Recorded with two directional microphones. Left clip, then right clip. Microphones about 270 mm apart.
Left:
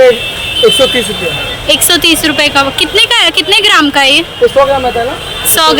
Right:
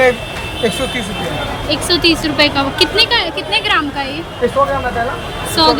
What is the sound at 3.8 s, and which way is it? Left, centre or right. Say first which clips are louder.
Speech: left 13 dB; centre.